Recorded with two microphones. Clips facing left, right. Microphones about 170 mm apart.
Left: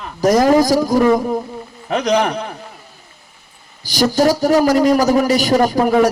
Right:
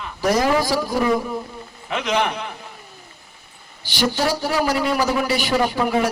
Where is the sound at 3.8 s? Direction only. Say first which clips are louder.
Left 7 dB; 40° left (ahead or behind).